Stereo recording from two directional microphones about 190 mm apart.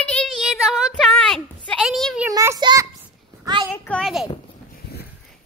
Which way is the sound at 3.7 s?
5° left (ahead or behind).